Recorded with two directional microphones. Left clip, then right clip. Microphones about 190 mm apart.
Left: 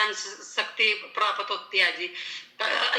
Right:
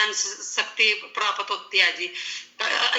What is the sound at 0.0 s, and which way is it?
A man's voice, 20° right (ahead or behind).